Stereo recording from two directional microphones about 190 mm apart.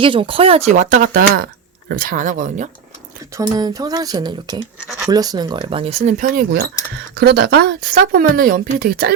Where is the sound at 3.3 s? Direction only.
20° right (ahead or behind).